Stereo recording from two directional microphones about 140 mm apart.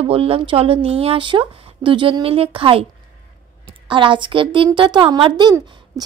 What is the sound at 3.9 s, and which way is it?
A woman's voice, 35° right (ahead or behind).